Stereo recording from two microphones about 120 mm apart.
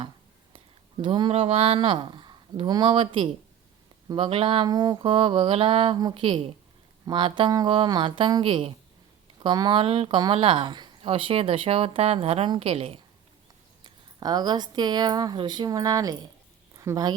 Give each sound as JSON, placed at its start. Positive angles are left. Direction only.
{"t": 0.5, "sound": "a sound", "side_deg": -45}
{"t": 1.3, "sound": "speech", "side_deg": -60}
{"t": 5.0, "sound": "speech", "side_deg": -50}
{"t": 6.0, "sound": "speech", "side_deg": -35}
{"t": 6.2, "sound": "speech", "side_deg": -50}
{"t": 9.4, "sound": "speech", "side_deg": -40}
{"t": 9.8, "sound": "speech", "side_deg": -55}
{"t": 11.1, "sound": "speech", "side_deg": -50}
{"t": 13.8, "sound": "a woman's voice", "side_deg": -35}